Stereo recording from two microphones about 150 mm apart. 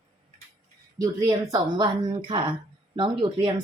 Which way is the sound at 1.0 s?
20° right (ahead or behind).